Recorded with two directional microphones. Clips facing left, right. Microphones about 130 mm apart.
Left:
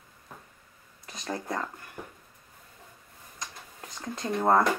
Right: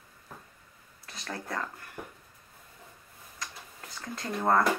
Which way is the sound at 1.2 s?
20° left (ahead or behind).